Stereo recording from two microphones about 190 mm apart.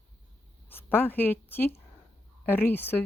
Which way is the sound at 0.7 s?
10° left (ahead or behind).